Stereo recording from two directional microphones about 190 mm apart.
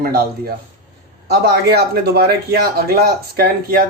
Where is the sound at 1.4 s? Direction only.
55° right (ahead or behind).